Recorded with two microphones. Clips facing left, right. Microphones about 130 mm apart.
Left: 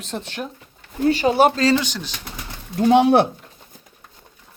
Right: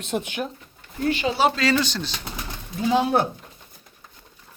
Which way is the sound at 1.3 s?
50° left (ahead or behind).